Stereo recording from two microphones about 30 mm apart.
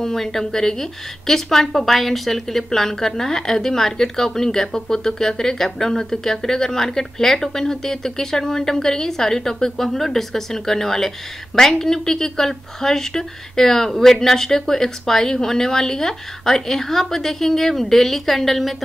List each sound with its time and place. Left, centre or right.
0.0 s a woman's voice: centre